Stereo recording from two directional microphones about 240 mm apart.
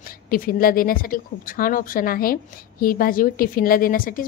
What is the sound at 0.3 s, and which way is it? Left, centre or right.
A woman's voice, left.